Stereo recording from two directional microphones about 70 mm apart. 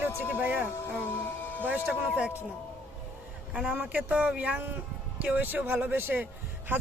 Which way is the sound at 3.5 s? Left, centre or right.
Centre.